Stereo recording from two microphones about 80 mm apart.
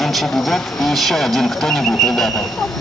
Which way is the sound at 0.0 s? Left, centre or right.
Centre.